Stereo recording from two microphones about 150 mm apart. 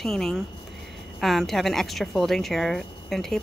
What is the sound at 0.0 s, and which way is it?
Speech, centre (ahead or behind).